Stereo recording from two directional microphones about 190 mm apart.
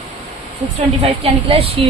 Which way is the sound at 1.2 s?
30° right (ahead or behind).